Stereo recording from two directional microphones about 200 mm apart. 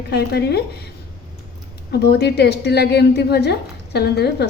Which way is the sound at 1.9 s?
55° left (ahead or behind).